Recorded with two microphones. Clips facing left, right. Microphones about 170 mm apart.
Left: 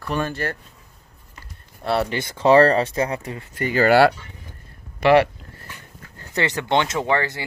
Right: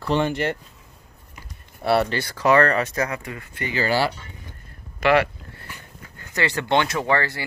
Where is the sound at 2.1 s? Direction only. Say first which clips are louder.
Left 3 dB; 20° left (ahead or behind).